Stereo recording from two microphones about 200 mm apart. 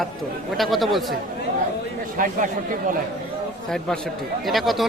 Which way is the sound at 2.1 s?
45° right (ahead or behind).